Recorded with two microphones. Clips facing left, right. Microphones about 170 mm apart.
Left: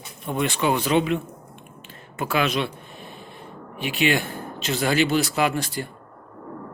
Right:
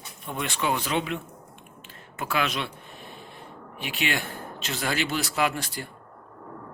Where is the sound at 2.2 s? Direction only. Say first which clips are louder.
Left 4 dB; 5° left (ahead or behind).